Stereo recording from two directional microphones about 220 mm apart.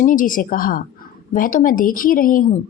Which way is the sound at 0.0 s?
35° left (ahead or behind).